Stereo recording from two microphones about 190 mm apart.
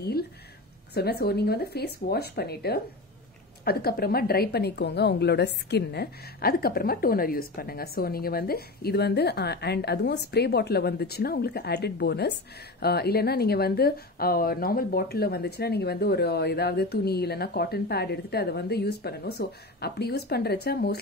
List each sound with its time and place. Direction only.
0.9 s a woman's voice: 55° left (ahead or behind)